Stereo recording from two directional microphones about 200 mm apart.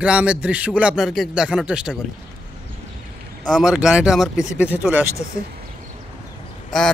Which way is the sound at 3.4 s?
Centre (ahead or behind).